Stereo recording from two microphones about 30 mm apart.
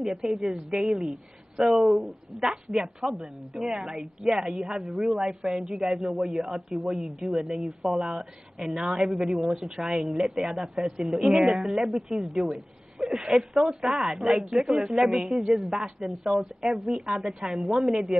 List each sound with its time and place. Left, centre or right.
0.0 s a man's voice: right
1.6 s speech: centre
2.7 s a man's voice: right
9.5 s a man's voice: right
12.5 s a sound: centre
13.3 s a man's voice: right
17.4 s a woman's voice: right